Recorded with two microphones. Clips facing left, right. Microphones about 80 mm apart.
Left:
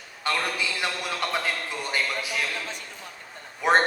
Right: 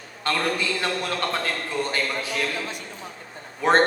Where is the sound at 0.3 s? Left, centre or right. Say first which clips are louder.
Right 3 dB; centre.